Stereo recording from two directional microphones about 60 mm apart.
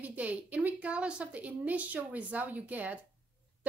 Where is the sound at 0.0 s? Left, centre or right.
Right.